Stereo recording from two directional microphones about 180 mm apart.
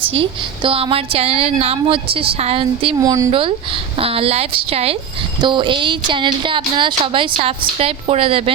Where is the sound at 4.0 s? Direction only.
30° right (ahead or behind).